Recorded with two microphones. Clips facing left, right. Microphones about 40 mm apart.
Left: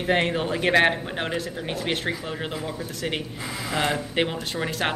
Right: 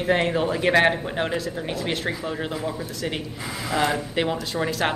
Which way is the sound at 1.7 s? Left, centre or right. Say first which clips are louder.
Left 1 dB; left.